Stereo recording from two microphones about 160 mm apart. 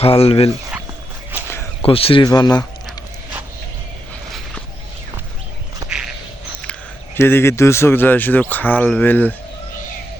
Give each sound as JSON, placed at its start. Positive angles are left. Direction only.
{"t": 0.0, "sound": "speech", "side_deg": 40}
{"t": 1.8, "sound": "speech", "side_deg": 35}
{"t": 5.8, "sound": "duck", "side_deg": -20}
{"t": 7.2, "sound": "speech", "side_deg": 15}